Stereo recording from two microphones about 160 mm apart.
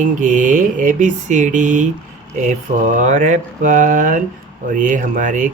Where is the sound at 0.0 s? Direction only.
50° right (ahead or behind).